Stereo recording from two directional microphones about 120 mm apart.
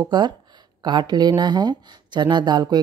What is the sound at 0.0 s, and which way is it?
Speech, 40° right (ahead or behind).